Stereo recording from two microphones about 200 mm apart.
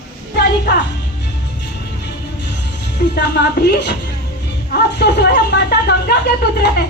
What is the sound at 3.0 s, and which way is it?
Speech, 55° left (ahead or behind).